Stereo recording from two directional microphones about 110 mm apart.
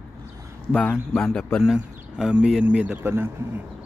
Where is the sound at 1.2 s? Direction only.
10° left (ahead or behind).